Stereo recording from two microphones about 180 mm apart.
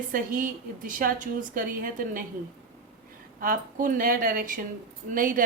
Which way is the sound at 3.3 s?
50° right (ahead or behind).